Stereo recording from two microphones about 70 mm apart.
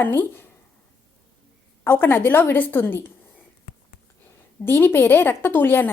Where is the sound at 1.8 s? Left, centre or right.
Left.